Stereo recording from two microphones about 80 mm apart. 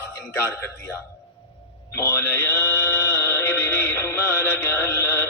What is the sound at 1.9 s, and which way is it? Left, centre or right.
Mantra, left.